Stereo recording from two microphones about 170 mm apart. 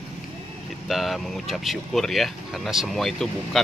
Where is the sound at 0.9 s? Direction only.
Centre (ahead or behind).